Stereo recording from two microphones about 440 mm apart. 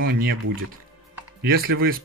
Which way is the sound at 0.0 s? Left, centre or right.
Right.